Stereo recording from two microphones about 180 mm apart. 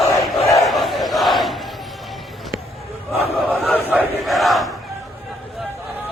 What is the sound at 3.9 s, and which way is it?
Crowd, 5° right (ahead or behind).